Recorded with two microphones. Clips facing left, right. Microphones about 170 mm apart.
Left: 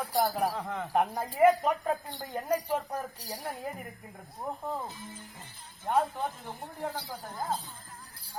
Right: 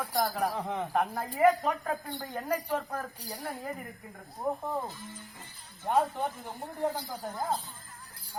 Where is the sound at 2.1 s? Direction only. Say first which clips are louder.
Left 2 dB; 15° left (ahead or behind).